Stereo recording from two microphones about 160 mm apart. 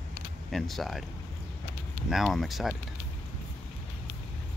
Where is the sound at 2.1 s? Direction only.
Centre (ahead or behind).